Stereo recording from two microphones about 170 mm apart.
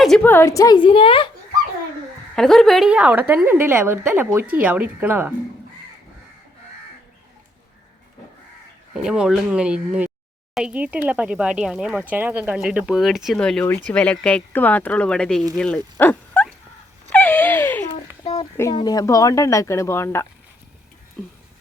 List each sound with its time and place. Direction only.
0.0 s speech: 5° left (ahead or behind); by 1.3 s 30° left (ahead or behind)
2.3 s a woman's voice: 5° left (ahead or behind)
9.0 s speech: 5° right (ahead or behind)
17.1 s a sound: 10° left (ahead or behind)
18.7 s speech: 25° left (ahead or behind)
21.2 s speech: 5° left (ahead or behind)